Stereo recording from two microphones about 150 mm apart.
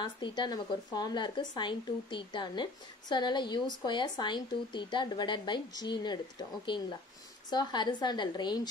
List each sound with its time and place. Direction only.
0.0 s a woman's voice: 30° left (ahead or behind)